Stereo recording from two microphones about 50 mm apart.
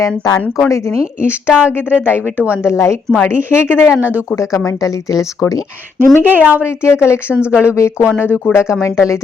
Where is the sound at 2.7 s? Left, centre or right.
Left.